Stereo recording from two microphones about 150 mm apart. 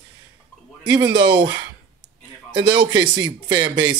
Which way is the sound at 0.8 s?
30° right (ahead or behind).